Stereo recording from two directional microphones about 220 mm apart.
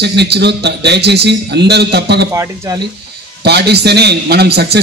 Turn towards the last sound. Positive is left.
turn(degrees=-45)  # may be behind; listen again after turning